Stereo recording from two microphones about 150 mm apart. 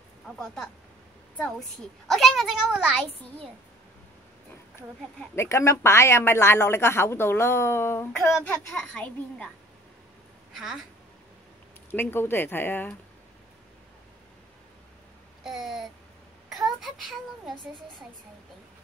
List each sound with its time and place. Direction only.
2.0 s speech: centre (ahead or behind)
5.3 s speech: 20° left (ahead or behind)
8.5 s speech: 5° left (ahead or behind)
10.5 s a woman's voice: 5° right (ahead or behind)
11.9 s speech: 15° left (ahead or behind)
15.4 s speech: centre (ahead or behind)
16.4 s a sound: centre (ahead or behind)